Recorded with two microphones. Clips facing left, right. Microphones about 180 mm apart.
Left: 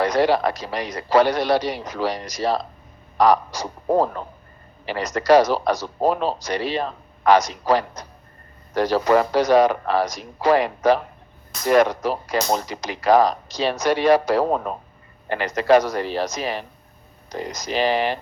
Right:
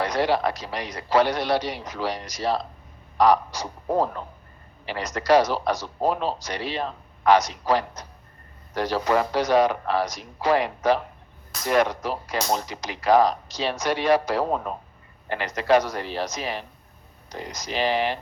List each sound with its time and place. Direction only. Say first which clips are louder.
0.0 s speech: left 4 dB; 45° left (ahead or behind)